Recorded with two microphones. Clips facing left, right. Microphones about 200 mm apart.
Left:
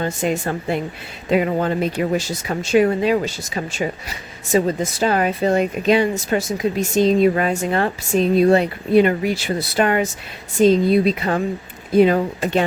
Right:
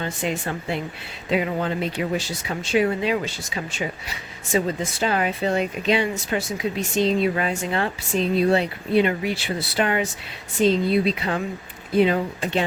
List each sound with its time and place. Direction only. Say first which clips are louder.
0.0 s speech: left 5 dB; 45° left (ahead or behind)